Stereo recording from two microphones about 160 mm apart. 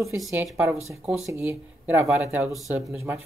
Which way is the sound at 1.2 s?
15° right (ahead or behind).